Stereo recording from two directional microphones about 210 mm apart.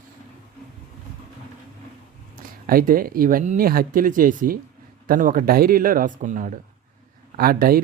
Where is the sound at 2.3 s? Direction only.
45° right (ahead or behind).